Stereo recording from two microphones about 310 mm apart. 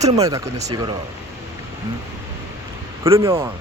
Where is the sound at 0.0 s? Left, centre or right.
Centre.